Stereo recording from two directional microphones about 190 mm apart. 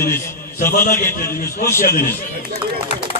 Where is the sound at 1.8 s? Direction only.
50° left (ahead or behind).